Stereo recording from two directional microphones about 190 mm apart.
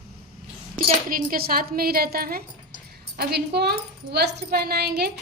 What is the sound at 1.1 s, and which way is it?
A woman's voice, 50° right (ahead or behind).